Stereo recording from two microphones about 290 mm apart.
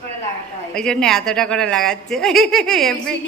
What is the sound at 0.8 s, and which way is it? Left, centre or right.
A woman's voice, centre.